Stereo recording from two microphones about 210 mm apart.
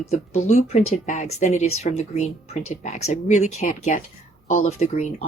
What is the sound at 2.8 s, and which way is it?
Speech, 35° left (ahead or behind).